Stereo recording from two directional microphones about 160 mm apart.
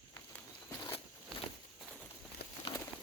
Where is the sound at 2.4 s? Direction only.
90° left.